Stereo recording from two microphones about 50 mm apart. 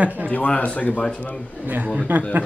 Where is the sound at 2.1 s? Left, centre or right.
Right.